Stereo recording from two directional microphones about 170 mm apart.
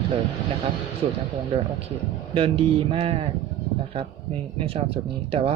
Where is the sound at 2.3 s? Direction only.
35° right (ahead or behind).